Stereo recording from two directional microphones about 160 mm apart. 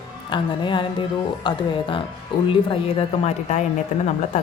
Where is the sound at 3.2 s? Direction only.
45° left (ahead or behind).